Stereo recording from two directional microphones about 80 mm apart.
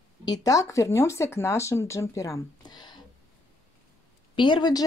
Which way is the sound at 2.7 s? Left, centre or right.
Left.